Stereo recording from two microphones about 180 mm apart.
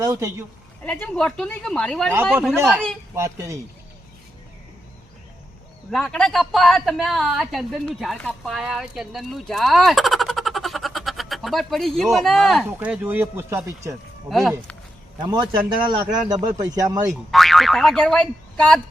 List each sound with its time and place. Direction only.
0.0 s speech: 15° right (ahead or behind)
0.9 s speech: 5° left (ahead or behind)
2.6 s speech: 10° right (ahead or behind)
5.9 s a woman's voice: 5° left (ahead or behind); by 13.9 s 15° right (ahead or behind)
14.3 s speech: centre (ahead or behind)
15.2 s speech: 25° right (ahead or behind)
17.3 s speech: centre (ahead or behind)